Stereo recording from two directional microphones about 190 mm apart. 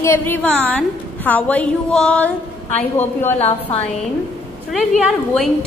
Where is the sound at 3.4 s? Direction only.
35° left (ahead or behind).